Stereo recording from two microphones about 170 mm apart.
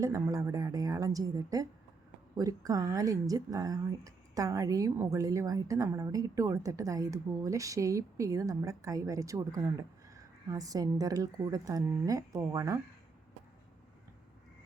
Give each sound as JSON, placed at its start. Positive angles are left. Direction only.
{"t": 0.0, "sound": "a woman's voice", "side_deg": -20}